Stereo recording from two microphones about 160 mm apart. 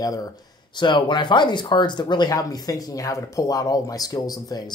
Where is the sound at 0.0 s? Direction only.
25° left (ahead or behind).